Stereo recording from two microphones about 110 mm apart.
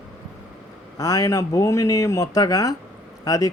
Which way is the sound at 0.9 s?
35° left (ahead or behind).